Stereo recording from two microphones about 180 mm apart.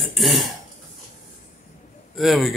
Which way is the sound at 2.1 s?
Centre (ahead or behind).